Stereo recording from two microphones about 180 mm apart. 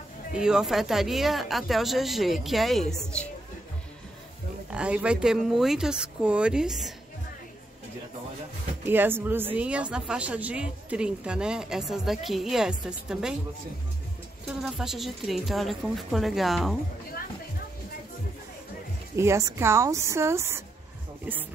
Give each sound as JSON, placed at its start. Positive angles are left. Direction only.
{"t": 0.3, "sound": "a woman's voice", "side_deg": -5}
{"t": 4.7, "sound": "a woman's voice", "side_deg": -5}
{"t": 8.8, "sound": "a woman's voice", "side_deg": -10}
{"t": 14.6, "sound": "a woman's voice", "side_deg": 0}
{"t": 19.1, "sound": "a woman's voice", "side_deg": -15}